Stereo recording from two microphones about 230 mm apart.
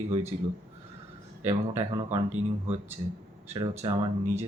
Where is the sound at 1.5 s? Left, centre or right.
Right.